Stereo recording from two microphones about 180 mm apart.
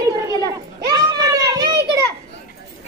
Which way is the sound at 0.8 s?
20° right (ahead or behind).